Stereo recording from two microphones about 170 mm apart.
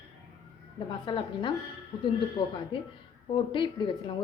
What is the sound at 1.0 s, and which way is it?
Speech, 30° left (ahead or behind).